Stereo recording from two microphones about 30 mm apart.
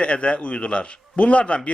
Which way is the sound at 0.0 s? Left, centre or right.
Left.